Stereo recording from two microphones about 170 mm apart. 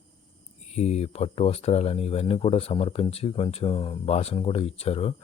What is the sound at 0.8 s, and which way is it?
Speech, 40° left (ahead or behind).